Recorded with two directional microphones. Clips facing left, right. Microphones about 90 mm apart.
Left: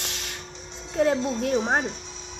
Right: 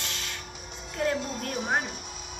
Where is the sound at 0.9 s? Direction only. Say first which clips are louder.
Left 6 dB; 30° left (ahead or behind).